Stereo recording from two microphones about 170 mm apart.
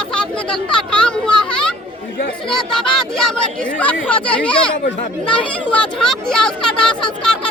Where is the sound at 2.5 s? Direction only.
5° left (ahead or behind).